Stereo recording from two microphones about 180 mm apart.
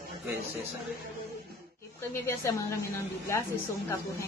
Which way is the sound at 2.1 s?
15° left (ahead or behind).